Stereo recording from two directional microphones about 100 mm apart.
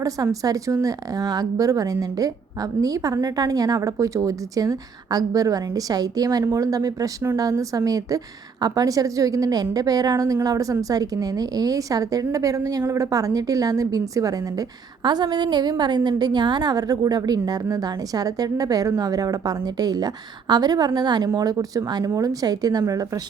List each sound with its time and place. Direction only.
0.0 s a woman's voice: 35° right (ahead or behind)